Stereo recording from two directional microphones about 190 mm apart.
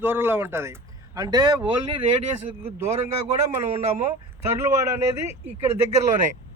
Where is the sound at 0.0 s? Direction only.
10° right (ahead or behind).